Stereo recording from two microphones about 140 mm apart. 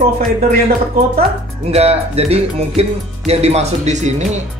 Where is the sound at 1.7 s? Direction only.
45° right (ahead or behind).